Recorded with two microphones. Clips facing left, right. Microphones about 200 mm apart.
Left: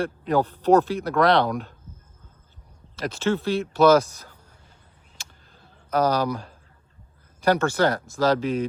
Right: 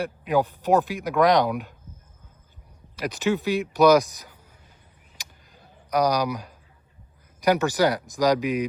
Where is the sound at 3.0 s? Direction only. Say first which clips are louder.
Even; 15° right (ahead or behind).